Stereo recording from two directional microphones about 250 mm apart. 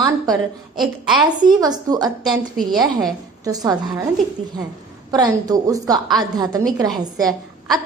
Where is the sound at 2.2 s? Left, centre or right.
Centre.